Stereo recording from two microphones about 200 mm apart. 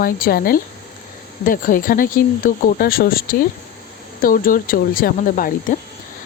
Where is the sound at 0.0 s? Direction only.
50° left (ahead or behind).